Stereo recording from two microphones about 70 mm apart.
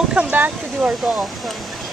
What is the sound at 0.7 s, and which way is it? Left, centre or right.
Speech, centre.